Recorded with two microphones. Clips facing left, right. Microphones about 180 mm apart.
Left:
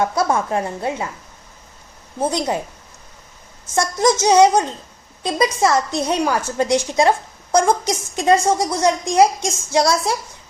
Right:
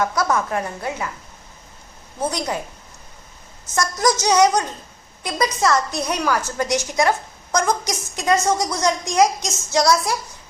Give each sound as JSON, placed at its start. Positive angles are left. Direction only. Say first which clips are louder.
{"t": 0.0, "sound": "a woman's voice", "louder": "left 2 dB", "side_deg": 25}
{"t": 2.1, "sound": "a woman's voice", "louder": "left 4 dB", "side_deg": 25}
{"t": 3.8, "sound": "a woman's voice", "louder": "left 3 dB", "side_deg": 25}